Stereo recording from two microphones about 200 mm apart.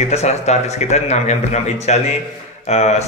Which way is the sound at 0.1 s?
35° left (ahead or behind).